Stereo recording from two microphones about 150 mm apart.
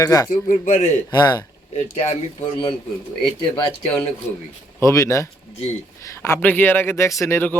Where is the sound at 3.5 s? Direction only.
35° left (ahead or behind).